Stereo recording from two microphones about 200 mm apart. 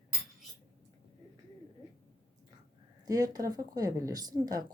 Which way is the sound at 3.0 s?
20° right (ahead or behind).